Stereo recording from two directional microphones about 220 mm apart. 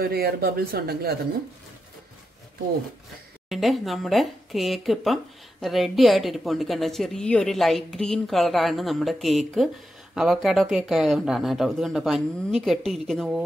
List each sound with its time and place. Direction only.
0.0 s speech: 45° right (ahead or behind)
3.4 s speech: centre (ahead or behind)